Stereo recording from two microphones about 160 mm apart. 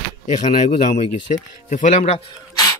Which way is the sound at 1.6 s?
50° left (ahead or behind).